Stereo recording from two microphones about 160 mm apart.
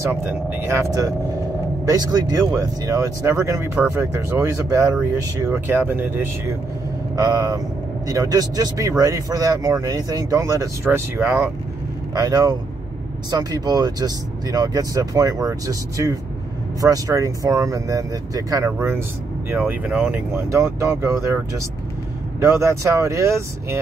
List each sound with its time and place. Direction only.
0.1 s speech: 15° right (ahead or behind)
22.4 s speech: 15° right (ahead or behind)